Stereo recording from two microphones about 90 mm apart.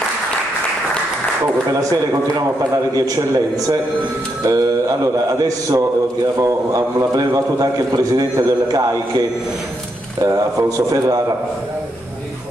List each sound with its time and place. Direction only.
1.7 s a man's voice: 40° right (ahead or behind)
10.2 s a man's voice: 35° right (ahead or behind)